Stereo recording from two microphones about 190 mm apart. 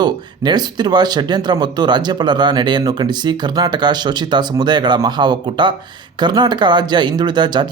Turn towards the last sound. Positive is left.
turn(degrees=-25)  # may be behind; listen again after turning